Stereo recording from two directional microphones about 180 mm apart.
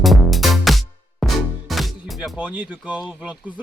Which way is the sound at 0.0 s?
Centre (ahead or behind).